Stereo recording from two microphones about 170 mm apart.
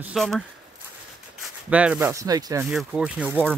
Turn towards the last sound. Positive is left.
turn(degrees=-10)  # may be behind; listen again after turning